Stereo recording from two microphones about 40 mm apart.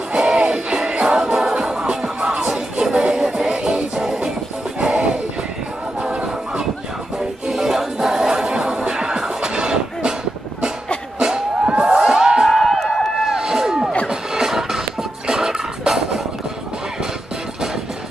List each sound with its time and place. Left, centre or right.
0.1 s music: centre
7.2 s music: centre
11.1 s music: centre
12.4 s a sound: centre
13.2 s a sound: centre
14.0 s music: centre